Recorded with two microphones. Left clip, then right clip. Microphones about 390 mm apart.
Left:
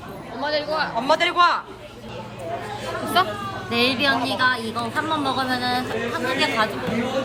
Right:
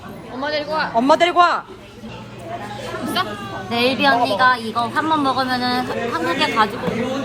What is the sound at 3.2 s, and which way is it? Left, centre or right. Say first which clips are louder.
Speech: left 3 dB; left.